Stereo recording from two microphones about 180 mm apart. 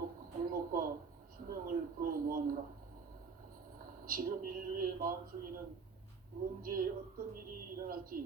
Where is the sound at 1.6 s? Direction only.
55° right (ahead or behind).